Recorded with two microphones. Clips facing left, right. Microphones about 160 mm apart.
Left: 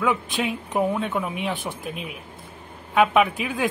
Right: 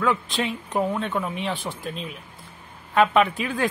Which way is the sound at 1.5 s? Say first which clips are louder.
Even; 20° left (ahead or behind).